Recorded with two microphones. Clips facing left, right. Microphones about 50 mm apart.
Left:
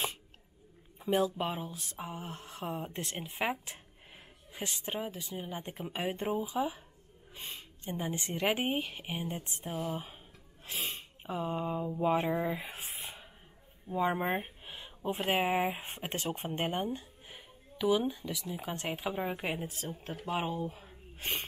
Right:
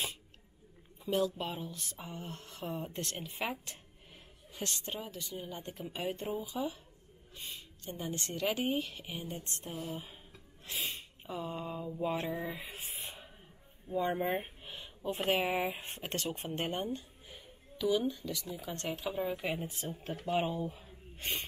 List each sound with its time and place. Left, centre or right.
1.0 s speech: left
7.8 s speech: left
9.4 s speech: centre; by 12.7 s left
12.7 s a sound: centre
13.8 s speech: centre
14.1 s speech: left
14.8 s a sound: centre
15.2 s speech: left
16.4 s music: centre
18.1 s speech: centre; by 19.6 s left
20.0 s speech: centre